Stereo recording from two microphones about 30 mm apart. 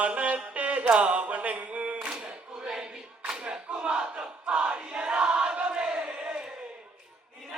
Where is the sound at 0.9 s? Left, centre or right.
Right.